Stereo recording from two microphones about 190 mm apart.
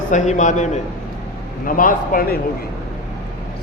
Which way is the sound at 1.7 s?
45° left (ahead or behind).